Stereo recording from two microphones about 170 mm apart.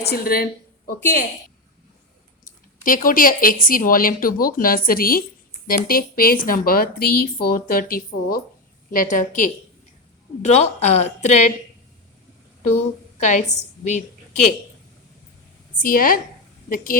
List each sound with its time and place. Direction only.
0.1 s speech: 60° left (ahead or behind)
2.4 s a woman's voice: 55° left (ahead or behind)
12.7 s a woman's voice: 45° left (ahead or behind)
15.8 s speech: 55° left (ahead or behind)